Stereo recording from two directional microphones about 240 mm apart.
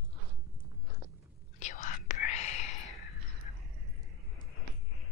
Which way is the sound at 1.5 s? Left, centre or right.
Left.